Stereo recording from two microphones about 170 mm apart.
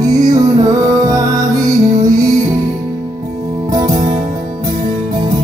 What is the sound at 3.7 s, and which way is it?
Music, 20° right (ahead or behind).